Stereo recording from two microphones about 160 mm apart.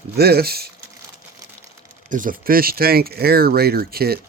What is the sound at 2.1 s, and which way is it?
Speech, 55° right (ahead or behind).